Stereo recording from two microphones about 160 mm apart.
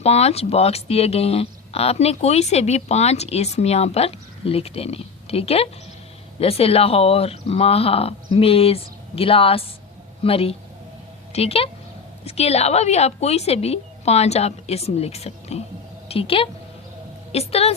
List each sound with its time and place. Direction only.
0.0 s a woman's voice: 40° left (ahead or behind)